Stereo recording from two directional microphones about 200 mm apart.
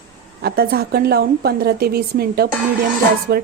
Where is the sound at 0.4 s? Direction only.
50° right (ahead or behind).